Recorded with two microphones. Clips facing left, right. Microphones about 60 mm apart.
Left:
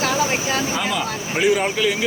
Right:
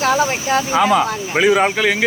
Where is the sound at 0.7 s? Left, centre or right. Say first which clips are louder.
Right 8 dB; right.